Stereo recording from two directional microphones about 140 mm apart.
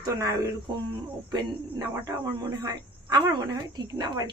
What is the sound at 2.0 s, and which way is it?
Speech, 25° right (ahead or behind).